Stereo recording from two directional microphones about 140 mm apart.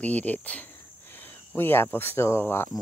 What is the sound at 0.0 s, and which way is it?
Speech, 10° left (ahead or behind).